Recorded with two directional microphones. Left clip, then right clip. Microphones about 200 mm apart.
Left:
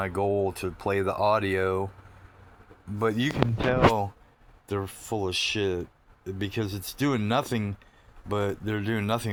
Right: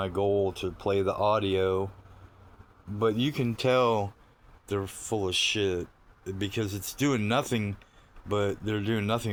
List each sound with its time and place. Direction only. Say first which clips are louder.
0.2 s speech: even; 40° left (ahead or behind)
3.0 s speech: even; 40° left (ahead or behind)
3.7 s speech: left 1 dB; centre (ahead or behind)